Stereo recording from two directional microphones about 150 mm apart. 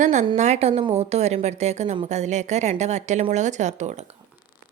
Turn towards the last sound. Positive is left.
turn(degrees=-50)  # may be behind; listen again after turning